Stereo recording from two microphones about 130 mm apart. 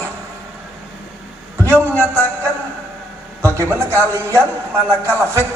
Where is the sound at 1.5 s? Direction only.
20° right (ahead or behind).